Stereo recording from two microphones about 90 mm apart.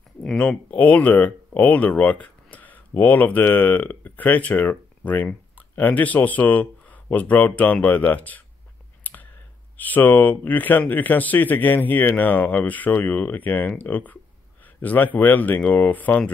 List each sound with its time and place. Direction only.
0.2 s speech: 10° left (ahead or behind)
9.0 s a sound: 20° left (ahead or behind)
9.8 s speech: 20° left (ahead or behind)